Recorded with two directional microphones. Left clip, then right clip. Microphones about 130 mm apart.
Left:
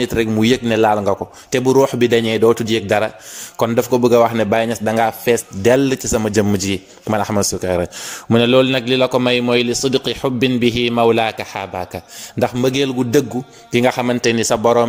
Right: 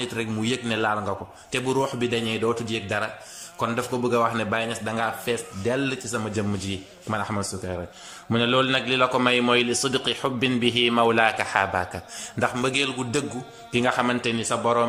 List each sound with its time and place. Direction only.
0.0 s speech: 60° left (ahead or behind)
8.3 s a man's voice: 45° left (ahead or behind); by 11.9 s 30° left (ahead or behind)
12.4 s a man's voice: 40° left (ahead or behind)
13.7 s a man's voice: 40° left (ahead or behind)